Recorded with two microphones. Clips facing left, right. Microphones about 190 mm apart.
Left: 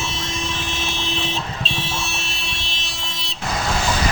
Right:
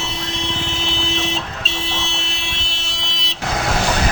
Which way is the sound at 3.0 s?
80° right.